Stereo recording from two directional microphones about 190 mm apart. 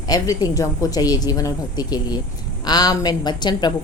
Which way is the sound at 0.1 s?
20° left (ahead or behind).